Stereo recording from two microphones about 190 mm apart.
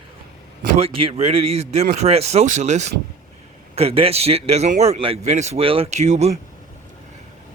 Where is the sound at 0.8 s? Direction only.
30° right (ahead or behind).